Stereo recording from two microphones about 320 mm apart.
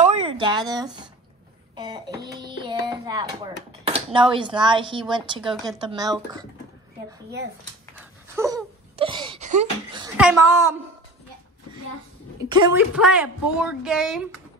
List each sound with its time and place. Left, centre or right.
0.0 s a sound: centre
3.8 s a woman's voice: centre
7.9 s a sound: centre
10.1 s a woman's voice: centre
12.4 s a woman's voice: centre
12.9 s speech: centre